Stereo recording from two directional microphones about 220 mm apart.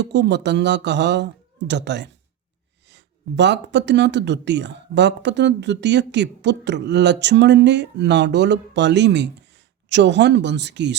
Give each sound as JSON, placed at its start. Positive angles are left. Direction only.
{"t": 0.0, "sound": "speech", "side_deg": -50}